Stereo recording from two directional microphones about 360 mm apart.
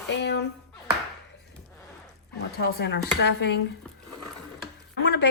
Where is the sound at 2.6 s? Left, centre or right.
Left.